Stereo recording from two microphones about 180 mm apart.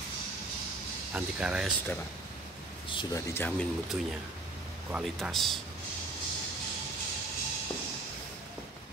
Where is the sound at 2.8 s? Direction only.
25° left (ahead or behind).